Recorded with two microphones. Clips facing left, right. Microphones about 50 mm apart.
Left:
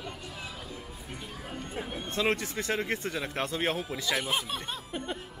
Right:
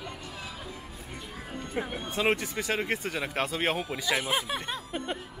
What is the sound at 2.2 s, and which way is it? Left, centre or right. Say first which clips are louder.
Speech: right 2 dB; centre.